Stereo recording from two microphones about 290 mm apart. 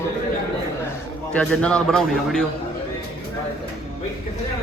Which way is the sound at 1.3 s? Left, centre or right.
Centre.